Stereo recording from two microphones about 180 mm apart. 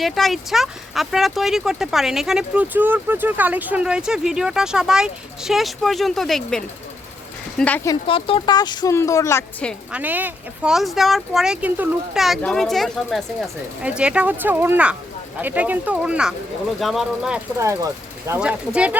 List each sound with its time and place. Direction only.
0.0 s speech: centre (ahead or behind)
8.0 s a woman's voice: 30° left (ahead or behind); by 9.7 s 10° left (ahead or behind)
9.9 s speech: 10° right (ahead or behind)
17.6 s speech: 15° right (ahead or behind)
18.3 s speech: 5° right (ahead or behind)